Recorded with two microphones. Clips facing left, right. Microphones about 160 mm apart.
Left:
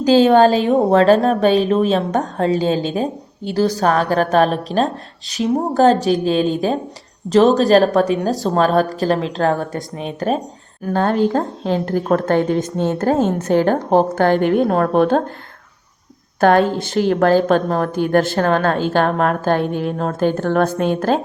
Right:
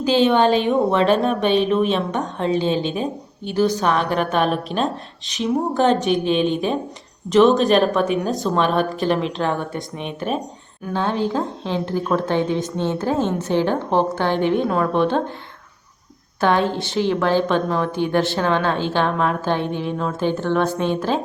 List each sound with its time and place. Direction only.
0.0 s a woman's voice: 40° left (ahead or behind)
10.8 s a woman's voice: 50° left (ahead or behind)
16.4 s a woman's voice: 50° left (ahead or behind)